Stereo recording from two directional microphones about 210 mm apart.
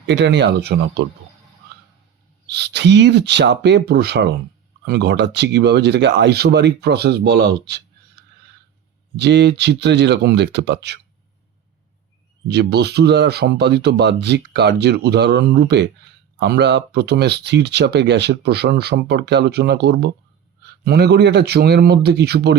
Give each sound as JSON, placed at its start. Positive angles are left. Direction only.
{"t": 0.1, "sound": "speech", "side_deg": -55}
{"t": 2.5, "sound": "speech", "side_deg": -55}
{"t": 9.1, "sound": "speech", "side_deg": -55}
{"t": 12.5, "sound": "speech", "side_deg": -50}